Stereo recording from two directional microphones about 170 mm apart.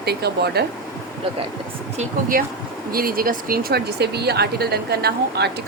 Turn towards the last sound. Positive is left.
turn(degrees=-70)  # may be behind; listen again after turning